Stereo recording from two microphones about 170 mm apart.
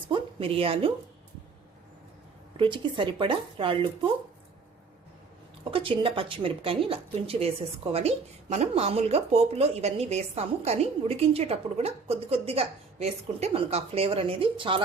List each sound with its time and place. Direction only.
0.1 s a woman's voice: 35° right (ahead or behind)
2.6 s speech: 30° right (ahead or behind)
5.7 s a woman's voice: 30° right (ahead or behind)